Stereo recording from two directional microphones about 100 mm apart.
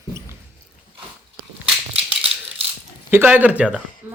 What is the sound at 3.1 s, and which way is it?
Speech, 20° right (ahead or behind).